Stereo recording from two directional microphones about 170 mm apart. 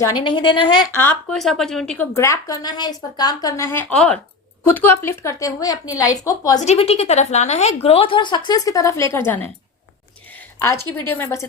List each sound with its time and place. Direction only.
0.0 s a woman's voice: 30° left (ahead or behind)
0.8 s a woman's voice: 15° left (ahead or behind)
1.3 s a woman's voice: centre (ahead or behind)
2.1 s a woman's voice: 20° left (ahead or behind)
6.6 s a woman's voice: 40° left (ahead or behind); by 9.5 s 10° left (ahead or behind)
10.8 s a woman's voice: 10° left (ahead or behind)